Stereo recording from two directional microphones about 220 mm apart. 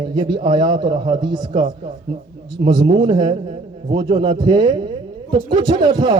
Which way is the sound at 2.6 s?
20° right (ahead or behind).